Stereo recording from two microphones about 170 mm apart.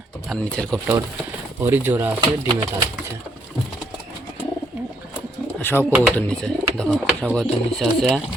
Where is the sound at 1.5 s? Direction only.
10° right (ahead or behind).